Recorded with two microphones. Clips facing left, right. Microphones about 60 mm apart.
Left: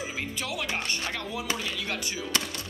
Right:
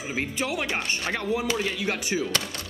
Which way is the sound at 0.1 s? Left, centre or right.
Right.